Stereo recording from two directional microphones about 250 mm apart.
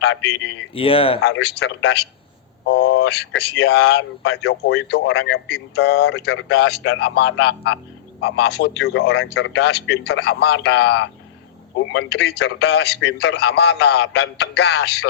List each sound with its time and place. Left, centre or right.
0.0 s speech: left
0.7 s speech: left
1.2 s speech: left